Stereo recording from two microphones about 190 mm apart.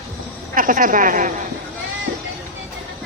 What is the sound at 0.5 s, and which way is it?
Speech, 45° right (ahead or behind).